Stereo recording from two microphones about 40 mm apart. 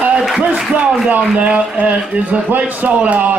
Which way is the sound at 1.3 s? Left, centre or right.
Right.